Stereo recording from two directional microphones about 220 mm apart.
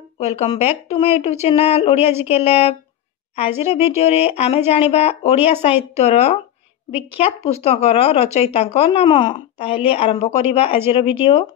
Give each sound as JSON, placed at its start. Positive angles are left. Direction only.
{"t": 0.2, "sound": "speech", "side_deg": 30}